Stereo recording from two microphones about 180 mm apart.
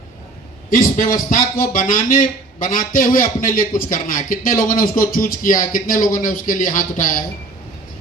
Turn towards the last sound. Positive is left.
turn(degrees=50)  # may be behind; listen again after turning